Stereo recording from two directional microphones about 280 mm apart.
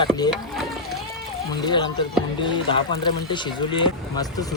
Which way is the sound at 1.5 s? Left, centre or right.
Centre.